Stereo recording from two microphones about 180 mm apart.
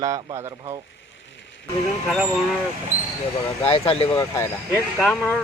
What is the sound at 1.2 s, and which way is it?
Music, 90° left.